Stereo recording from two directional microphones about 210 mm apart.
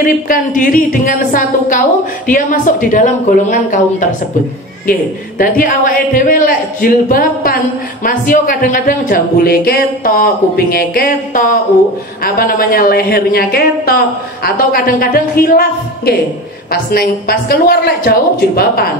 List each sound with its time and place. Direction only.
0.0 s a woman's voice: 40° left (ahead or behind)